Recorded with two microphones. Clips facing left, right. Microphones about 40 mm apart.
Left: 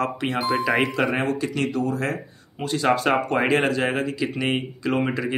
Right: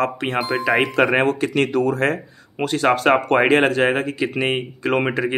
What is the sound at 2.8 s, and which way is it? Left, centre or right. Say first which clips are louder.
Speech: right 4 dB; right.